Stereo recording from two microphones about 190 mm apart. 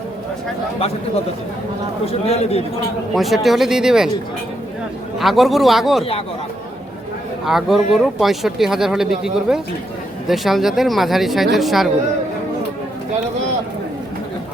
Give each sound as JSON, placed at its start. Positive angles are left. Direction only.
{"t": 2.0, "sound": "a man's voice", "side_deg": 35}
{"t": 3.2, "sound": "speech", "side_deg": 0}
{"t": 5.2, "sound": "speech", "side_deg": 0}
{"t": 7.4, "sound": "speech", "side_deg": 0}